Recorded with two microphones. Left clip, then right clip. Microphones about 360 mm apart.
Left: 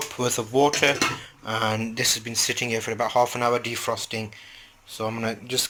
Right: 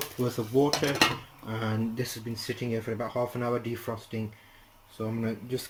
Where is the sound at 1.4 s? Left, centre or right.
Left.